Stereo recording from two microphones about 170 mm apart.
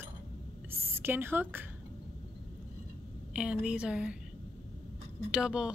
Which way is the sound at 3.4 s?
5° right (ahead or behind).